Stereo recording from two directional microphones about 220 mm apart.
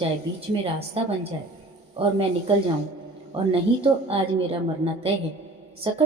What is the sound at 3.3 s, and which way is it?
A woman's voice, 25° right (ahead or behind).